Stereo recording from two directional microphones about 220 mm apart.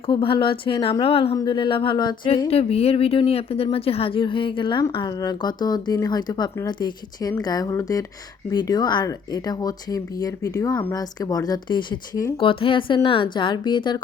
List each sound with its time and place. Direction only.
0.0 s speech: 25° left (ahead or behind)